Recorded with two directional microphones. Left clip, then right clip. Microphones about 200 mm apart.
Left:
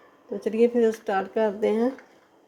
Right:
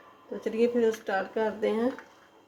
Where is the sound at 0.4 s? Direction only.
35° left (ahead or behind).